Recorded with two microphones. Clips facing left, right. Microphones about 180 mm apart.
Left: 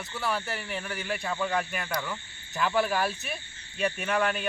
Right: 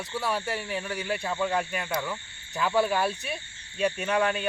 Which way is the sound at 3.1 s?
30° right (ahead or behind).